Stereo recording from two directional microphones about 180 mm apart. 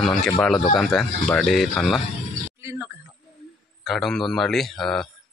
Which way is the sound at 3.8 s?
Centre (ahead or behind).